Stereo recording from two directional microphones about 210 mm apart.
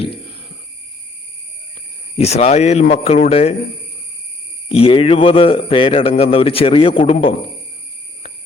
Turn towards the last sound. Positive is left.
turn(degrees=30)  # may be behind; listen again after turning